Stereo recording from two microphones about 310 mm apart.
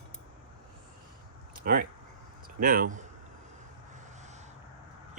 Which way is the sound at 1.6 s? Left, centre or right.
Right.